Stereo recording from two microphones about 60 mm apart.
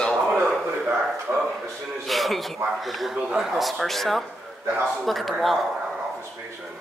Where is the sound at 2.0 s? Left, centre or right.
Centre.